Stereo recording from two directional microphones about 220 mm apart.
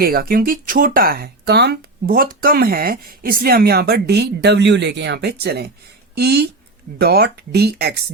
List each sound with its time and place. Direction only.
0.0 s speech: 45° right (ahead or behind)